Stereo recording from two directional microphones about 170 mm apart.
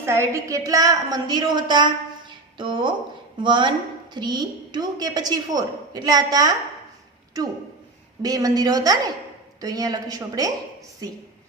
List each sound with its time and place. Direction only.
0.0 s a woman's voice: 15° right (ahead or behind)